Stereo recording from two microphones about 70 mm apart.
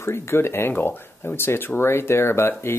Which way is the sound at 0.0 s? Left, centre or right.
Left.